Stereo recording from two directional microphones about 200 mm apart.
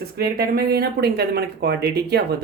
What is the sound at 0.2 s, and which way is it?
Speech, 50° right (ahead or behind).